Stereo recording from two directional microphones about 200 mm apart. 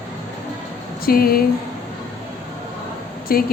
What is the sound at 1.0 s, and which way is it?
Speech, 50° left (ahead or behind).